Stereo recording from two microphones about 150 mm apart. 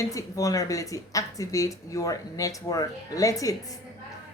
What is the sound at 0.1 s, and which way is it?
Speech, 20° left (ahead or behind).